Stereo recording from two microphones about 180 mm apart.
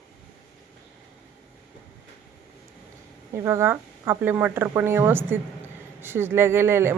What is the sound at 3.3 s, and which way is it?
Speech, 15° right (ahead or behind).